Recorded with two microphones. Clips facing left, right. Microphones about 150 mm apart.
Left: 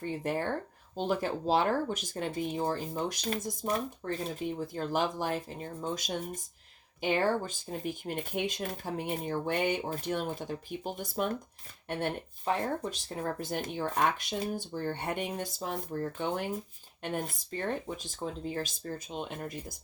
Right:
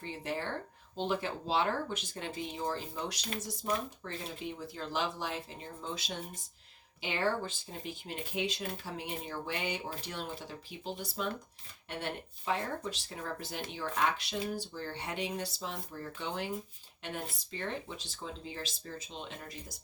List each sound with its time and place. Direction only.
0.0 s speech: 50° left (ahead or behind)
12.9 s speech: 45° left (ahead or behind)